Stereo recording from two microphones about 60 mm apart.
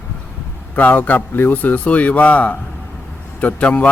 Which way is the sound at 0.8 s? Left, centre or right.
Left.